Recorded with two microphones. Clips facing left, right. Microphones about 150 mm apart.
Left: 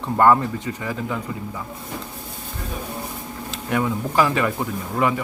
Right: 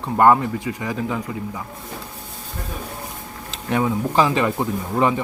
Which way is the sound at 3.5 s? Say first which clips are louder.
Right 2 dB; 20° right (ahead or behind).